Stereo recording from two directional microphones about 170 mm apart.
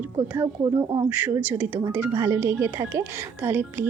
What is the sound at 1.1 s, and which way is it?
Speech, 10° right (ahead or behind).